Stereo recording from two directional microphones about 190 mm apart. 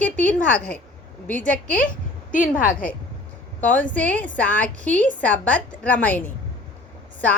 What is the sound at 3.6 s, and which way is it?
A woman's voice, 10° left (ahead or behind).